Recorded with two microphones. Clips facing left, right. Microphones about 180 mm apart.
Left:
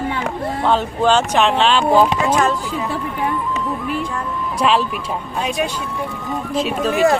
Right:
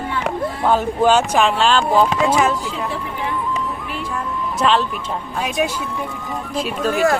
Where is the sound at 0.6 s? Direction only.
10° right (ahead or behind).